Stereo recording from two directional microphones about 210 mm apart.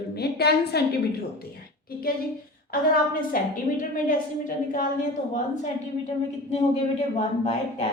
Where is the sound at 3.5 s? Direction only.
40° left (ahead or behind).